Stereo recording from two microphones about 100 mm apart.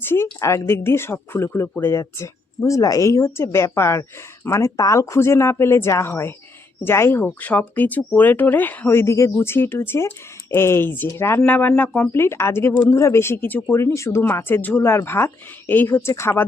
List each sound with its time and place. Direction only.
0.0 s a sound: 25° left (ahead or behind)
0.3 s speech: 30° left (ahead or behind); by 12.1 s 15° left (ahead or behind)
12.1 s speech: 25° left (ahead or behind)